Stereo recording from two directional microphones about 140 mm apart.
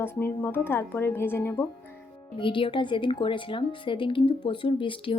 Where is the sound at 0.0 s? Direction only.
15° left (ahead or behind).